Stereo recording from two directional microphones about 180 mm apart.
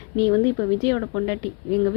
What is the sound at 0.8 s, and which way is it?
Speech, 20° left (ahead or behind).